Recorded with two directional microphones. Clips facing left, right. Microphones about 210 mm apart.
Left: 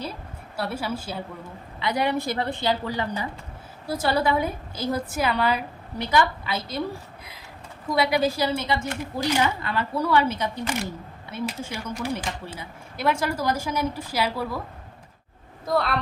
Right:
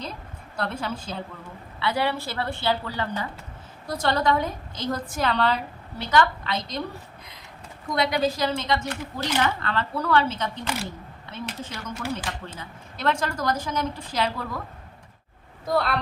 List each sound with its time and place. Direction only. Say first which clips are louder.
0.0 s a woman's voice: left 2 dB; 5° left (ahead or behind)
7.9 s speech: left 2 dB; 10° left (ahead or behind)
15.6 s speech: even; centre (ahead or behind)